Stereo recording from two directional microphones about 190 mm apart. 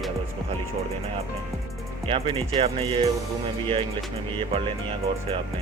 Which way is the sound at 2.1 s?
25° right (ahead or behind).